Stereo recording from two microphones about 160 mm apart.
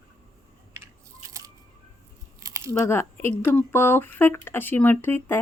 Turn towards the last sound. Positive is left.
turn(degrees=15)  # may be behind; listen again after turning